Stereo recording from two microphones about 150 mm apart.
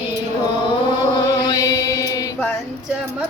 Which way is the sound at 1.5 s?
25° left (ahead or behind).